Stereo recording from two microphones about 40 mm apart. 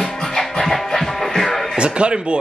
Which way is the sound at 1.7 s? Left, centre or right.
Right.